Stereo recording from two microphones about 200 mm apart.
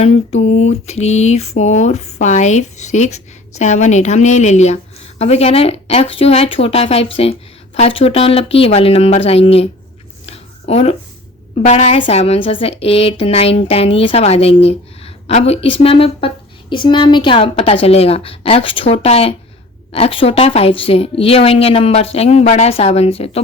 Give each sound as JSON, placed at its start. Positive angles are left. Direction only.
{"t": 0.0, "sound": "a woman's voice", "side_deg": 30}
{"t": 10.2, "sound": "a sound", "side_deg": 30}
{"t": 11.5, "sound": "speech", "side_deg": 35}